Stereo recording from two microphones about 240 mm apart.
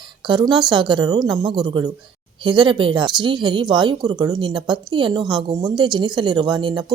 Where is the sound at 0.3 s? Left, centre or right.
Centre.